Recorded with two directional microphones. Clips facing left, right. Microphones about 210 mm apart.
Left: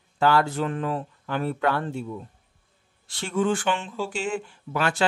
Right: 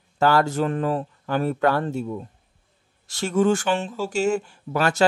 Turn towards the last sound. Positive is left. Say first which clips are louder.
# right 3 dB
turn(degrees=-40)  # may be behind; listen again after turning